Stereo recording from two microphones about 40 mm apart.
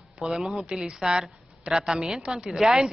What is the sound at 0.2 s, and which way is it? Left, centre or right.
A man's voice, centre.